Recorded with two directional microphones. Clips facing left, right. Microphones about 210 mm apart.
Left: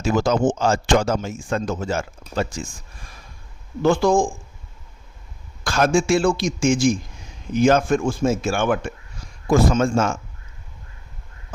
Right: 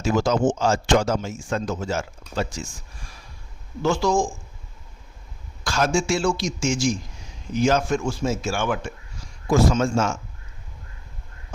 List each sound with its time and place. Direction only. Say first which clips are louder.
0.0 s speech: left 1 dB; 55° left (ahead or behind)
3.8 s speech: left 4 dB; 55° left (ahead or behind)
5.6 s speech: left 4 dB; 55° left (ahead or behind)